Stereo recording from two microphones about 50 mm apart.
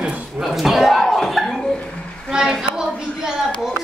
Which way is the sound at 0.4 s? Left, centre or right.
Centre.